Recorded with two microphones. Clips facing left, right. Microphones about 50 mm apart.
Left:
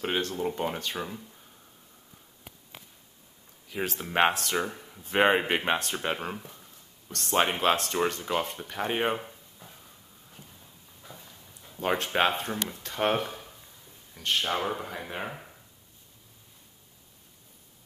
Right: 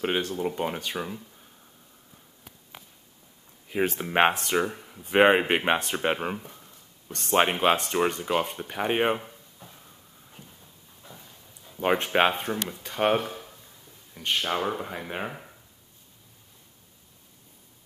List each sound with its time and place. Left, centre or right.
0.0 s speech: centre
3.6 s speech: right
6.2 s a sound: centre
7.5 s speech: centre
9.2 s a sound: centre
11.8 s speech: centre